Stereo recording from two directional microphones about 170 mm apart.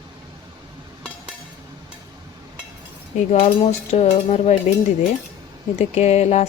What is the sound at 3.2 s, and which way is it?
A woman's voice, 40° left (ahead or behind).